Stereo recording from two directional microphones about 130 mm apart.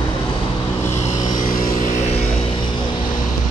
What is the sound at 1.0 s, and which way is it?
Vehicle, 65° left (ahead or behind).